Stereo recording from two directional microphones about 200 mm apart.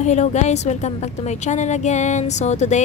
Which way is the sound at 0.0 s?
35° left (ahead or behind).